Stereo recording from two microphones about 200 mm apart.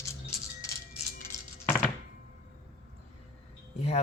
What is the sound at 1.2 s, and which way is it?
Music, 10° left (ahead or behind).